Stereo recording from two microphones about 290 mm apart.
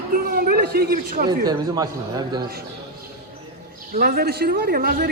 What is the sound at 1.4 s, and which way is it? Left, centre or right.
Speech, centre.